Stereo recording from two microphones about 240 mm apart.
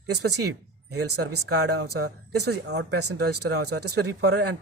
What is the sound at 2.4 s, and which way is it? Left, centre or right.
Speech, right.